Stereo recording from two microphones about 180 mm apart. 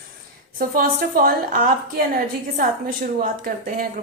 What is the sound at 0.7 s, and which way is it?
A woman's voice, 55° right (ahead or behind).